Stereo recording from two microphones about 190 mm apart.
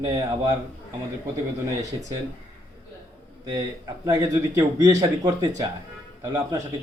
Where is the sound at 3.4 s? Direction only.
20° right (ahead or behind).